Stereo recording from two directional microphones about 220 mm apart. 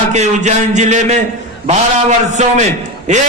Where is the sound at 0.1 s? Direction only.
30° right (ahead or behind).